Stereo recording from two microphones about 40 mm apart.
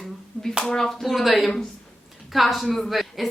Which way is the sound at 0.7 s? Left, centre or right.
Centre.